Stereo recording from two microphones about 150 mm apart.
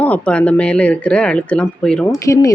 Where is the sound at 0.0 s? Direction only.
10° left (ahead or behind).